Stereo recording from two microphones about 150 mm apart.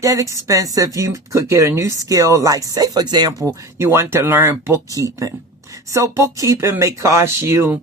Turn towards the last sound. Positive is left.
turn(degrees=-15)  # may be behind; listen again after turning